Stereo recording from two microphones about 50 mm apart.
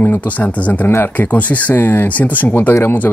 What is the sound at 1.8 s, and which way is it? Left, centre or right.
Speech, left.